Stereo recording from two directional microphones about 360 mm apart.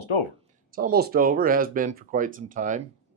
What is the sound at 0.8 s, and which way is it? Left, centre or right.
Speech, right.